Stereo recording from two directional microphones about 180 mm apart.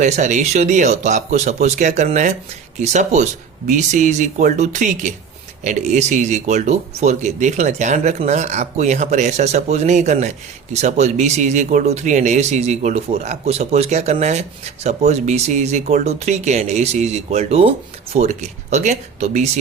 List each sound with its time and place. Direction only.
0.0 s speech: 40° right (ahead or behind)